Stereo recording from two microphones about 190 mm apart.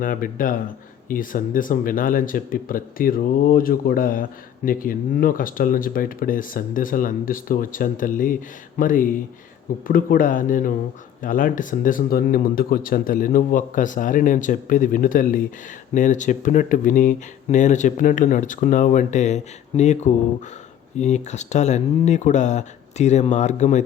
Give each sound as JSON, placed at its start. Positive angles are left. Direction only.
{"t": 0.0, "sound": "speech", "side_deg": 45}